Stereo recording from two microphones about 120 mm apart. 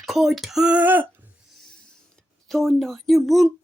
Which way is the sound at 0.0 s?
Centre (ahead or behind).